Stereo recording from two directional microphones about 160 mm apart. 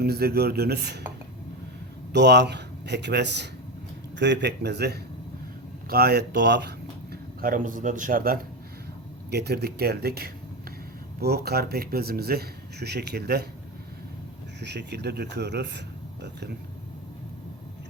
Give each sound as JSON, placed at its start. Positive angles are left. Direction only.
{"t": 0.0, "sound": "speech", "side_deg": -75}
{"t": 2.1, "sound": "speech", "side_deg": -90}
{"t": 5.9, "sound": "speech", "side_deg": -75}
{"t": 9.3, "sound": "speech", "side_deg": -90}
{"t": 14.6, "sound": "speech", "side_deg": -90}